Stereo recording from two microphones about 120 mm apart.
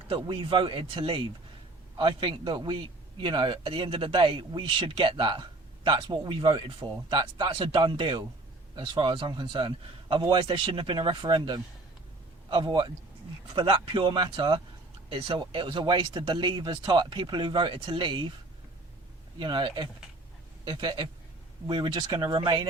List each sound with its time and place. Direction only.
0.1 s a man's voice: 45° right (ahead or behind)
19.4 s speech: 40° right (ahead or behind)